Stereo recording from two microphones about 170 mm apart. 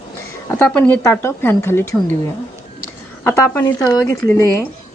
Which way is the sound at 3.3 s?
15° left (ahead or behind).